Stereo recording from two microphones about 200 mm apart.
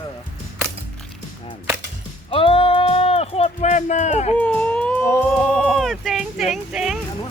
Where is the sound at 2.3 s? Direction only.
25° left (ahead or behind).